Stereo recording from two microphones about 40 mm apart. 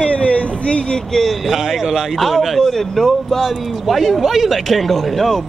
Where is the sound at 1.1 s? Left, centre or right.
Centre.